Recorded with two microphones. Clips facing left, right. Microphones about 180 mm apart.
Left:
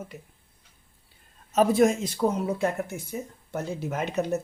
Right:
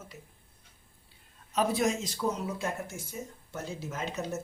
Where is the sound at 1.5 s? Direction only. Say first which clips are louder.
Left 7 dB; 50° left (ahead or behind).